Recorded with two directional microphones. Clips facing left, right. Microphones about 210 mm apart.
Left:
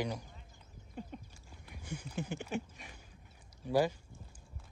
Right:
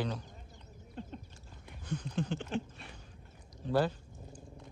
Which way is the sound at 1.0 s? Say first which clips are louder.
Right 1 dB; 10° left (ahead or behind).